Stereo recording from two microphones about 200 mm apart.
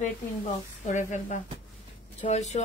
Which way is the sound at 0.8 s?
40° left (ahead or behind).